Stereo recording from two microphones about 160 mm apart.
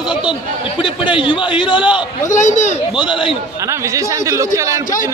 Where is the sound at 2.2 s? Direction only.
50° left (ahead or behind).